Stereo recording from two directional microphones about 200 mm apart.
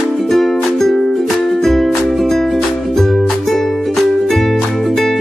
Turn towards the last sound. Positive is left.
turn(degrees=0)  # may be behind; listen again after turning